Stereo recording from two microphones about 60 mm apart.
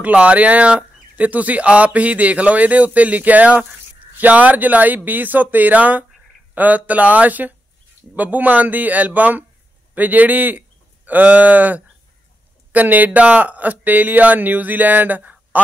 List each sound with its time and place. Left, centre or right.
0.0 s speech: right